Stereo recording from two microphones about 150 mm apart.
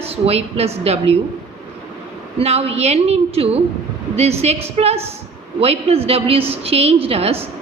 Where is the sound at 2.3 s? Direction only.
40° right (ahead or behind).